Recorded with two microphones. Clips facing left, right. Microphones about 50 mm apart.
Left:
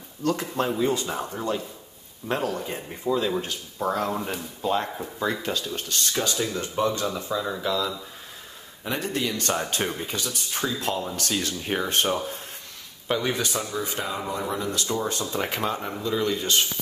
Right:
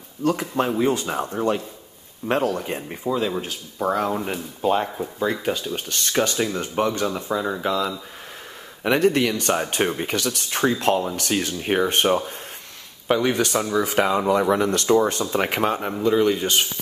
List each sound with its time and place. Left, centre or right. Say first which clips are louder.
0.2 s speech: right 3 dB; right
2.2 s speech: right 5 dB; right
3.0 s speech: even; centre
5.9 s speech: right 6 dB; right
8.8 s speech: right 9 dB; right
9.5 s speech: right 5 dB; right
10.0 s speech: right 6 dB; right
13.4 s speech: right 6 dB; right
13.7 s speech: right 9 dB; right